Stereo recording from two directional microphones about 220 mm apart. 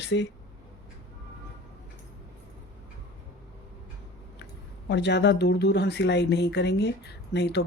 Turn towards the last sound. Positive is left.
turn(degrees=50)  # may be behind; listen again after turning